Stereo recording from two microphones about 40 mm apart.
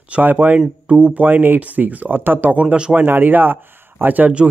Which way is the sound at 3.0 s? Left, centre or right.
Right.